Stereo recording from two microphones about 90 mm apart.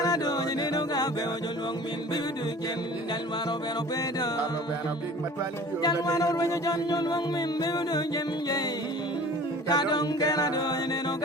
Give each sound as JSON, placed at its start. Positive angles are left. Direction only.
{"t": 0.0, "sound": "music", "side_deg": 45}
{"t": 5.8, "sound": "music", "side_deg": 45}
{"t": 9.6, "sound": "music", "side_deg": 50}